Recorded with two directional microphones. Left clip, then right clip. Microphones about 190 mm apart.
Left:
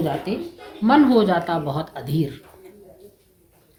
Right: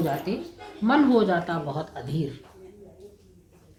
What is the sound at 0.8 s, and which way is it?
A woman's voice, 45° left (ahead or behind).